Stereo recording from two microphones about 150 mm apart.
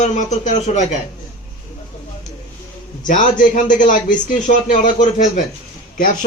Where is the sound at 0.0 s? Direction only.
55° left (ahead or behind).